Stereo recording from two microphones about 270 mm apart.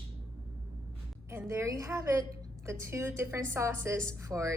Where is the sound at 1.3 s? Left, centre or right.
Centre.